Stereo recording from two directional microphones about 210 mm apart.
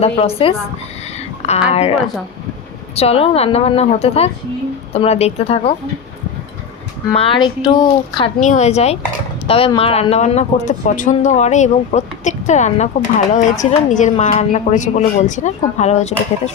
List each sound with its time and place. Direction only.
0.0 s a woman's voice: 30° left (ahead or behind)
1.4 s a sound: 30° left (ahead or behind)
1.7 s a woman's voice: 30° left (ahead or behind)
7.2 s a woman's voice: 20° left (ahead or behind)
8.4 s speech: 35° left (ahead or behind)